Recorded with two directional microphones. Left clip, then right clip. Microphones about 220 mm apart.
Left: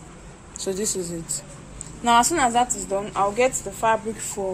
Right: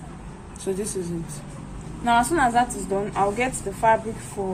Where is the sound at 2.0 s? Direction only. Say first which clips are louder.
Left 1 dB; 35° left (ahead or behind).